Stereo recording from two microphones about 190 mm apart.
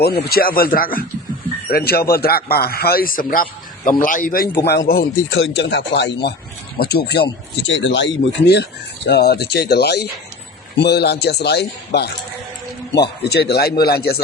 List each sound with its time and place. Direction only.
0.0 s a man's voice: 55° left (ahead or behind)
5.3 s a man's voice: 70° left (ahead or behind)
7.7 s a man's voice: 70° left (ahead or behind)
13.3 s a man's voice: 55° left (ahead or behind)